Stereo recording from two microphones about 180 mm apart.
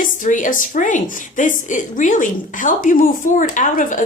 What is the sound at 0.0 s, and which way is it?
A woman's voice, 45° left (ahead or behind).